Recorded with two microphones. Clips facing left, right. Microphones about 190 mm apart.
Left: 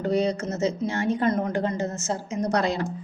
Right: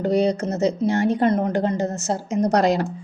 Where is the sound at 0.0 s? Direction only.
35° right (ahead or behind).